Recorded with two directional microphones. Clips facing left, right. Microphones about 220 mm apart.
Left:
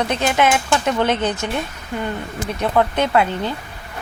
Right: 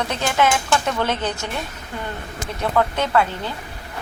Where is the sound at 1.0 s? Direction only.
20° left (ahead or behind).